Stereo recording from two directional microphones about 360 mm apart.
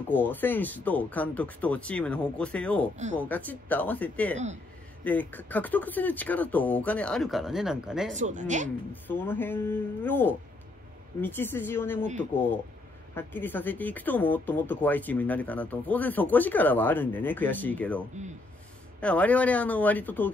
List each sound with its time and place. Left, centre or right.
0.1 s speech: centre
8.1 s speech: right
9.0 s speech: centre